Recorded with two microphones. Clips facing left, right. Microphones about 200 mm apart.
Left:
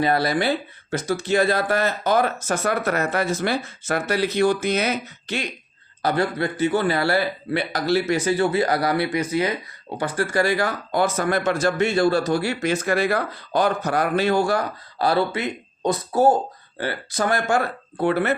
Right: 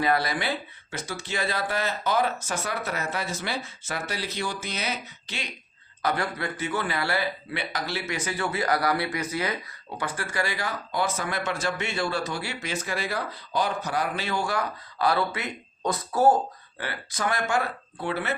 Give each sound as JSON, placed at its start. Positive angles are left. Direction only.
{"t": 0.0, "sound": "speech", "side_deg": 30}
{"t": 6.0, "sound": "a man's voice", "side_deg": 30}
{"t": 10.0, "sound": "speech", "side_deg": 35}
{"t": 16.8, "sound": "speech", "side_deg": 40}